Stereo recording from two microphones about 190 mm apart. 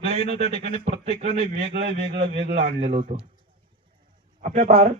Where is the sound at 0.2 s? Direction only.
35° left (ahead or behind).